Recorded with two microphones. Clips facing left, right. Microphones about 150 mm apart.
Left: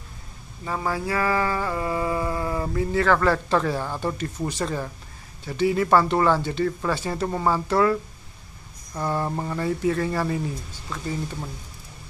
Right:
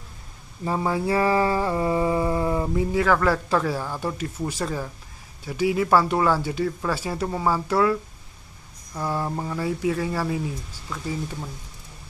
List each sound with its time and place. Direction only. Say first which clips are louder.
0.7 s mantra: right 3 dB; 20° right (ahead or behind); by 4.3 s 5° right (ahead or behind)
4.5 s speech: left 1 dB; 5° right (ahead or behind)